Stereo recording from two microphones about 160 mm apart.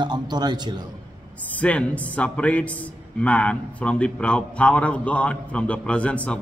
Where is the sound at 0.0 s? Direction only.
25° right (ahead or behind).